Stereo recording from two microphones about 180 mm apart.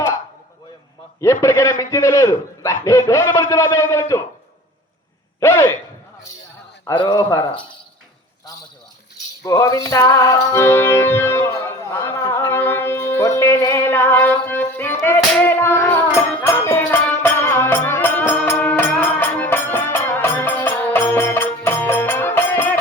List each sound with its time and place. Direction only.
1.2 s a man's voice: 15° left (ahead or behind)
5.4 s a man's voice: 15° left (ahead or behind)
6.8 s speech: 25° left (ahead or behind)
9.4 s music: 20° left (ahead or behind)